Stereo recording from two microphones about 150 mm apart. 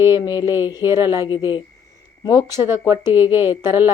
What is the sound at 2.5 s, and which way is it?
A woman's voice, 15° right (ahead or behind).